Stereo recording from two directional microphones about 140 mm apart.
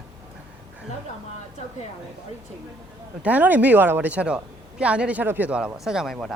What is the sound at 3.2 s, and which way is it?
A woman's voice, 10° right (ahead or behind).